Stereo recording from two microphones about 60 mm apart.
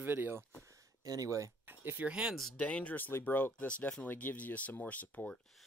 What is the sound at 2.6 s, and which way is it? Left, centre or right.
Speech, left.